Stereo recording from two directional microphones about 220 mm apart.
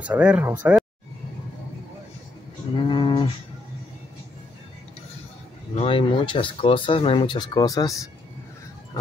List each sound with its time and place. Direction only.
0.0 s speech: 5° right (ahead or behind)
2.7 s cattle: 20° left (ahead or behind)
5.8 s speech: 25° left (ahead or behind)